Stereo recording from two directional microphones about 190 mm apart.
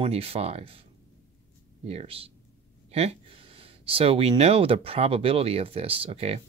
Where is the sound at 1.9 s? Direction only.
30° right (ahead or behind).